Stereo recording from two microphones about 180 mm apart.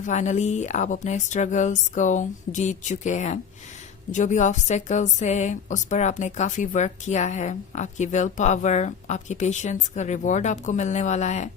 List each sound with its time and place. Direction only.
0.0 s a woman's voice: 40° left (ahead or behind)